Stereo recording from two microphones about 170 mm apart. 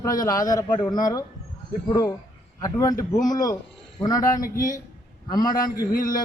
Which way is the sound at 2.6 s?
20° left (ahead or behind).